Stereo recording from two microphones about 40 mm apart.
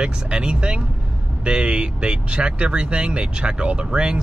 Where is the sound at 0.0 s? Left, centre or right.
Right.